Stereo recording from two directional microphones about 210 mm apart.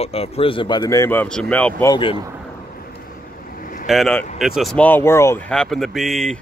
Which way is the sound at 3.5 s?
40° left (ahead or behind).